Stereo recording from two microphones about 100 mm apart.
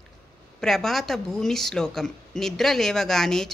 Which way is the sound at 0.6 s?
5° left (ahead or behind).